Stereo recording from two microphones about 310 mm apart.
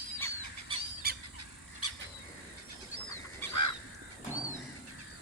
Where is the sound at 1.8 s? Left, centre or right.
Right.